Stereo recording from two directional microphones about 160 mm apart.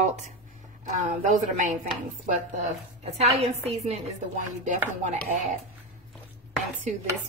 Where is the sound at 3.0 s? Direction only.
40° right (ahead or behind).